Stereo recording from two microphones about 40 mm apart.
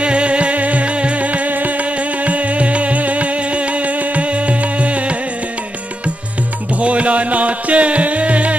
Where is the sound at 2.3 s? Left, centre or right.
Right.